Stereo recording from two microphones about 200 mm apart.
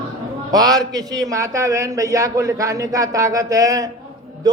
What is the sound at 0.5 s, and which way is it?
A man's voice, 20° right (ahead or behind).